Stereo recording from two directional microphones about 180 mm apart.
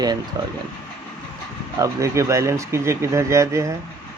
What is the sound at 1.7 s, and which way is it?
Speech, 15° right (ahead or behind).